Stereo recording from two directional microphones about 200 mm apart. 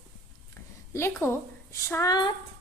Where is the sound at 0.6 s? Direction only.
10° left (ahead or behind).